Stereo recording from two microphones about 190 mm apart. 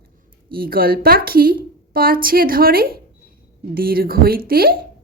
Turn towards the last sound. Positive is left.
turn(degrees=-50)  # may be behind; listen again after turning